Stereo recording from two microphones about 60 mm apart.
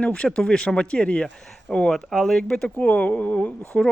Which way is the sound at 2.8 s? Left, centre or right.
Left.